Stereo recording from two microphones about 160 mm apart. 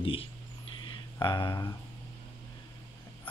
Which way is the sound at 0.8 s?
30° left (ahead or behind).